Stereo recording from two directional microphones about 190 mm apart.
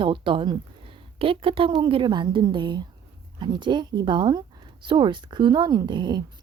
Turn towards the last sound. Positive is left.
turn(degrees=-25)  # may be behind; listen again after turning